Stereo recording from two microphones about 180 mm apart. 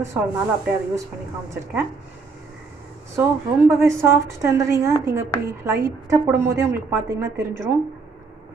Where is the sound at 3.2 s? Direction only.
15° right (ahead or behind).